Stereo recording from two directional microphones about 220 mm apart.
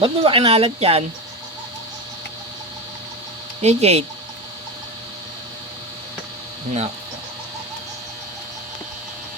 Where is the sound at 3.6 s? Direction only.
30° right (ahead or behind).